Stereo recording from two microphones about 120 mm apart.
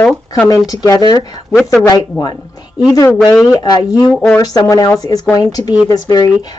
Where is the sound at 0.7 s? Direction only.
35° left (ahead or behind).